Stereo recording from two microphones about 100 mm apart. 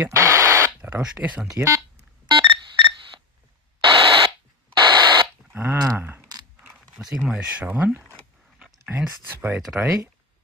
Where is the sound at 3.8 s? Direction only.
55° right (ahead or behind).